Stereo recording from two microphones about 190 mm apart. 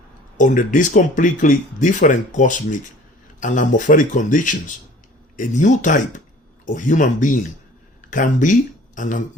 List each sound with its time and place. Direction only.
0.3 s speech: 45° left (ahead or behind)